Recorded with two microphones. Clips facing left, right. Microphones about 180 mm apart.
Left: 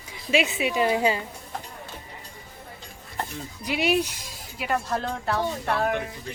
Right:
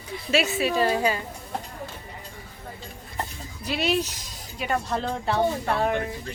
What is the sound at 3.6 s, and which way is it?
Speech, 15° left (ahead or behind).